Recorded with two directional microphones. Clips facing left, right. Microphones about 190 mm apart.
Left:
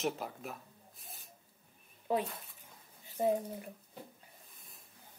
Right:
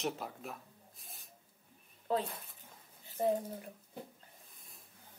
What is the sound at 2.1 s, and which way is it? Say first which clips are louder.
Speech: left 1 dB; 15° left (ahead or behind).